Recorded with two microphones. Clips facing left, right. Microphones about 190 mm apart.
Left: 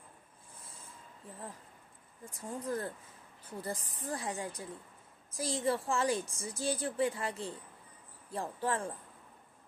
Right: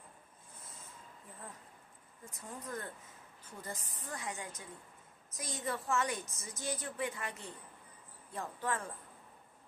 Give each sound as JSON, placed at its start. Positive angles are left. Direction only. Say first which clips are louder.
{"t": 2.3, "sound": "a woman's voice", "louder": "left 7 dB", "side_deg": 30}